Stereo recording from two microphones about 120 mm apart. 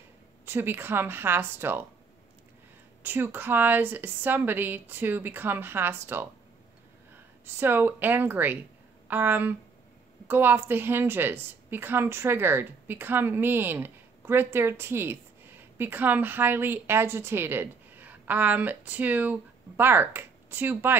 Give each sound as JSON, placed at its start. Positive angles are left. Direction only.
{"t": 0.5, "sound": "speech", "side_deg": -20}
{"t": 3.0, "sound": "a woman's voice", "side_deg": -15}
{"t": 7.4, "sound": "a woman's voice", "side_deg": -15}